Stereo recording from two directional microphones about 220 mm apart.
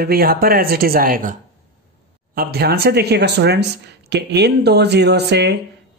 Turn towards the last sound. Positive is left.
turn(degrees=-50)  # may be behind; listen again after turning